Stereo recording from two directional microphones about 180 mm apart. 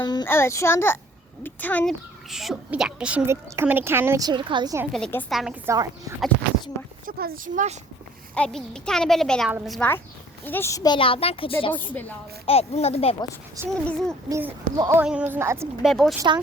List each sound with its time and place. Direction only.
0.0 s a child's voice: 25° left (ahead or behind)
2.3 s a woman's voice: centre (ahead or behind); by 4.8 s 25° right (ahead or behind)
4.9 s a child's voice: 5° left (ahead or behind)
5.6 s a woman's voice: 20° right (ahead or behind)
7.0 s speech: 55° right (ahead or behind)
8.4 s a child's voice: 5° left (ahead or behind)
10.4 s speech: 10° left (ahead or behind); by 11.5 s 30° left (ahead or behind)
11.7 s a child's voice: 10° left (ahead or behind)
12.5 s a child's voice: 35° left (ahead or behind)
13.7 s a child's voice: 5° left (ahead or behind)
14.3 s a woman's voice: 15° right (ahead or behind)
15.8 s a child's voice: centre (ahead or behind)